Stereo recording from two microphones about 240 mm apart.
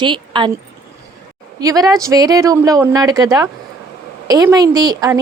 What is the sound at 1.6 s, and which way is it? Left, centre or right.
A woman's voice, centre.